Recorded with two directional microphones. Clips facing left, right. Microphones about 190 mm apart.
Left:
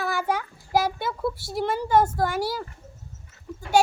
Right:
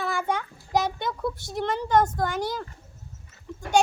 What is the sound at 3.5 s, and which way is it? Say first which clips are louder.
Pig: left 2 dB; 5° left (ahead or behind).